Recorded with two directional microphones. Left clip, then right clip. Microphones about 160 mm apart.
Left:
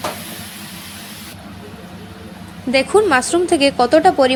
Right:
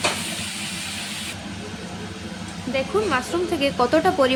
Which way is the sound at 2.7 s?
45° left (ahead or behind).